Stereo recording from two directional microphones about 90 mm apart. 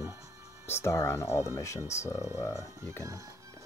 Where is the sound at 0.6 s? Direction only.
30° left (ahead or behind).